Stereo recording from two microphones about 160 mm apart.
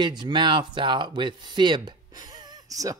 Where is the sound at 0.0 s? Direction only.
30° right (ahead or behind).